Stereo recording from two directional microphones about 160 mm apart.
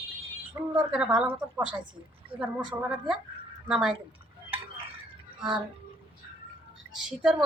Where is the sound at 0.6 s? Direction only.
20° right (ahead or behind).